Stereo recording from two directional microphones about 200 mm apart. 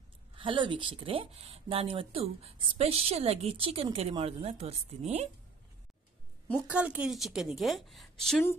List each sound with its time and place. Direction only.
0.4 s speech: 25° right (ahead or behind)
6.5 s a woman's voice: 5° right (ahead or behind)